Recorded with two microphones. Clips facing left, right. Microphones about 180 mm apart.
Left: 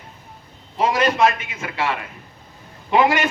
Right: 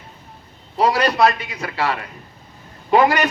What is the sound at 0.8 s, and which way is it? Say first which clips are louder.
A man's voice: right 1 dB; 35° right (ahead or behind).